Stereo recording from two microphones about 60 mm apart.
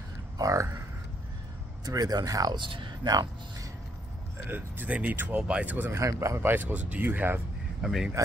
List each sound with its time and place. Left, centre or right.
0.4 s speech: right
1.9 s a man's voice: right
4.5 s speech: right
5.9 s speech: right
6.5 s speech: right
7.8 s speech: centre